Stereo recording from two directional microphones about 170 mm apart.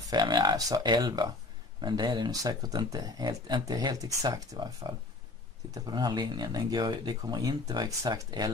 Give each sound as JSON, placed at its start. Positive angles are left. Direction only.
{"t": 0.1, "sound": "speech", "side_deg": -25}